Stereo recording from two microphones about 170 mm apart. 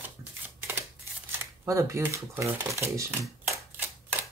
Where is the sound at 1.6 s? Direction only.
15° right (ahead or behind).